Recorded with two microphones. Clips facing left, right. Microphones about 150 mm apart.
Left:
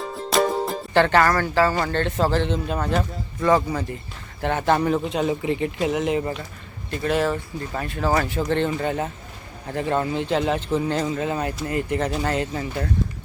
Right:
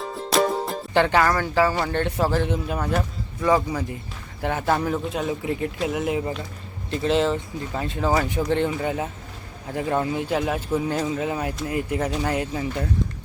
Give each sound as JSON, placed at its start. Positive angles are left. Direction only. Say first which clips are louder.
{"t": 0.0, "sound": "music", "louder": "even", "side_deg": 0}
{"t": 0.9, "sound": "speech", "louder": "left 2 dB", "side_deg": -15}
{"t": 6.9, "sound": "speech", "louder": "right 1 dB", "side_deg": -25}